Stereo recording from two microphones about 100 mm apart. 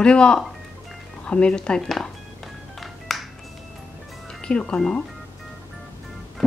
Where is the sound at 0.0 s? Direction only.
10° left (ahead or behind).